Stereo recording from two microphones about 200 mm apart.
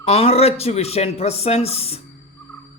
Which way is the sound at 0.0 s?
30° left (ahead or behind).